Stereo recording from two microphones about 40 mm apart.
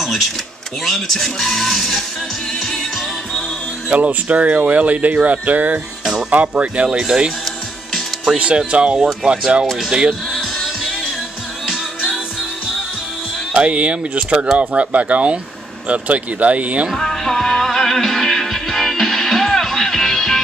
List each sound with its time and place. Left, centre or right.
0.0 s a sound: centre
0.8 s speech: centre
3.9 s speech: right
8.4 s speech: right
9.8 s speech: centre
10.3 s music: centre
13.6 s speech: right
16.9 s music: centre